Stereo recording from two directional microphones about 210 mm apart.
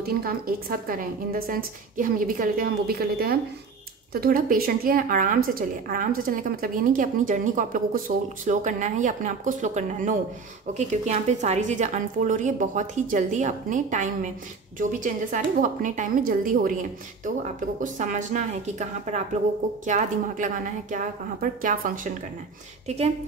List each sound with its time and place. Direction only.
0.0 s a woman's voice: 45° right (ahead or behind)
17.7 s a woman's voice: 35° right (ahead or behind)